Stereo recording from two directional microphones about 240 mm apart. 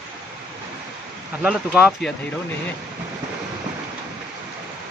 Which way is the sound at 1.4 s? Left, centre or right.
Centre.